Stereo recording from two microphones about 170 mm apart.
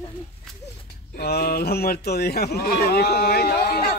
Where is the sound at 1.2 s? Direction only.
70° left (ahead or behind).